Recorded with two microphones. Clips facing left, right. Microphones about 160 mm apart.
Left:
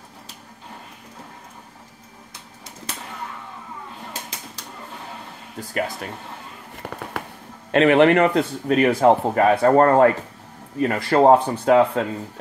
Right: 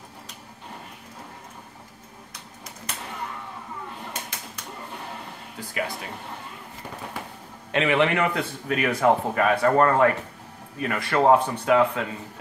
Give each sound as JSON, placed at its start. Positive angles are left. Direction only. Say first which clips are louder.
{"t": 7.2, "sound": "a sound", "louder": "left 6 dB", "side_deg": 70}
{"t": 7.7, "sound": "a man's voice", "louder": "left 7 dB", "side_deg": 50}
{"t": 8.4, "sound": "a man's voice", "louder": "left 8 dB", "side_deg": 35}